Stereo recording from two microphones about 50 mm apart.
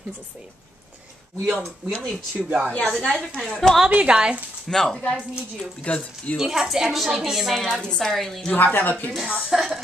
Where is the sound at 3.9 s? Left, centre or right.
Right.